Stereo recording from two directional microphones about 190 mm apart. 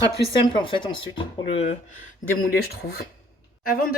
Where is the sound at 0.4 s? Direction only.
25° left (ahead or behind).